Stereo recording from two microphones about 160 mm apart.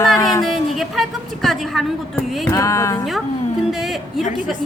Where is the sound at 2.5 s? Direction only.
20° left (ahead or behind).